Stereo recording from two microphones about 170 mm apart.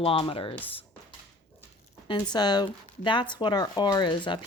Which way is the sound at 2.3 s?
25° left (ahead or behind).